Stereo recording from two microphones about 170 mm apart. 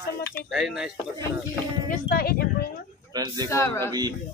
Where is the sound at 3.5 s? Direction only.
15° left (ahead or behind).